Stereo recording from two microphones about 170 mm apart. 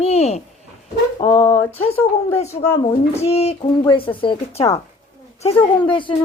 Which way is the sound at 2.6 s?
40° left (ahead or behind).